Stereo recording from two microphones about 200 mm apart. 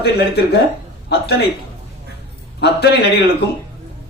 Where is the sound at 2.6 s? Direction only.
55° left (ahead or behind).